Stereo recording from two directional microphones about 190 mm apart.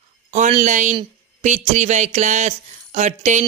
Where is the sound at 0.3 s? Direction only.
40° right (ahead or behind).